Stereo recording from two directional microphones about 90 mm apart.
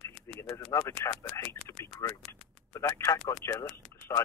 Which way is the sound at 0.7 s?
35° left (ahead or behind).